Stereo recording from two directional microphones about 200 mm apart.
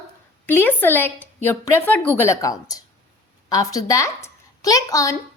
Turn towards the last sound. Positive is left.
turn(degrees=15)  # may be behind; listen again after turning